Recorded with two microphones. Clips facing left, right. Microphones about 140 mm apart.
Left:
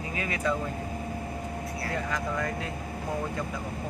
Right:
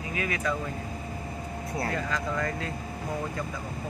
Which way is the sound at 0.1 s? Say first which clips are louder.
Right 2 dB; 25° left (ahead or behind).